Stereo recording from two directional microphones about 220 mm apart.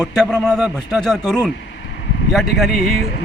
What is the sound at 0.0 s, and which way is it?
Speech, 5° left (ahead or behind).